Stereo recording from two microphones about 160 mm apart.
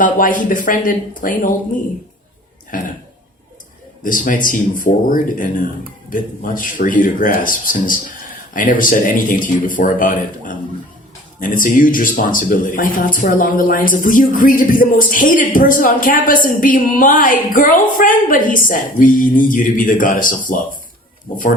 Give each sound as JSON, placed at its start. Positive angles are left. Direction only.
{"t": 0.0, "sound": "speech", "side_deg": 55}
{"t": 2.7, "sound": "speech", "side_deg": 60}
{"t": 4.0, "sound": "speech", "side_deg": 55}